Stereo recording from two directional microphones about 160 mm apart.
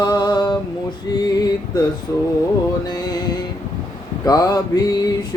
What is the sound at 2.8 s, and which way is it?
Music, 25° left (ahead or behind).